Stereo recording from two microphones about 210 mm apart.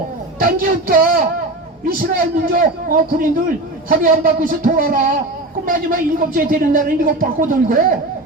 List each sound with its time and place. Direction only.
0.3 s a man's voice: 40° right (ahead or behind)